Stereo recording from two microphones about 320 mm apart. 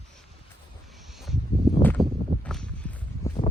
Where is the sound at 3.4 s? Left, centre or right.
Centre.